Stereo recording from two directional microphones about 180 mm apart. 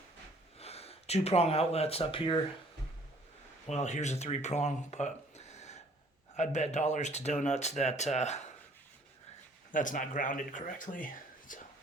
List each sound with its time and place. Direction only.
0.6 s speech: 35° left (ahead or behind)
3.7 s speech: 40° left (ahead or behind)
9.7 s speech: 45° left (ahead or behind)